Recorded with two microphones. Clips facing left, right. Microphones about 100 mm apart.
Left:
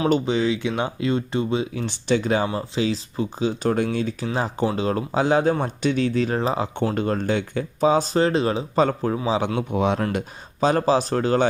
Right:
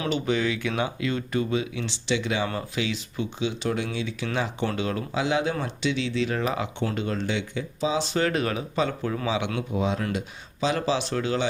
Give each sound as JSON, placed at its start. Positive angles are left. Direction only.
{"t": 0.3, "sound": "speech", "side_deg": 30}
{"t": 6.9, "sound": "speech", "side_deg": 45}
{"t": 8.8, "sound": "speech", "side_deg": 40}
{"t": 9.6, "sound": "speech", "side_deg": 65}
{"t": 10.0, "sound": "speech", "side_deg": 50}